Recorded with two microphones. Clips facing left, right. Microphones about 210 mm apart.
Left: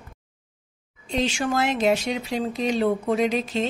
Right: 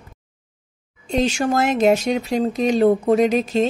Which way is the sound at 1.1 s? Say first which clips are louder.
Right 5 dB; 45° right (ahead or behind).